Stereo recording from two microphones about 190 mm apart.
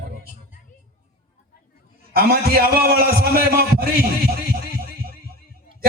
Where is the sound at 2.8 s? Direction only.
55° right (ahead or behind).